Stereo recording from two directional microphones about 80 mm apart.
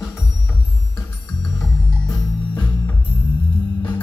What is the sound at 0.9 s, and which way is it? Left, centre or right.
Music, centre.